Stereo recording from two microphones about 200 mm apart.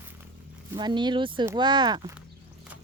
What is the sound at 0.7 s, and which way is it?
Speech, 20° right (ahead or behind).